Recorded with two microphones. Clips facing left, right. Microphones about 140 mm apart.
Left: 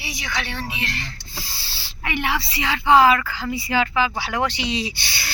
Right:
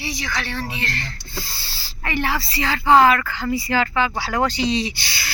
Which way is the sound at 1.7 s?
5° left (ahead or behind).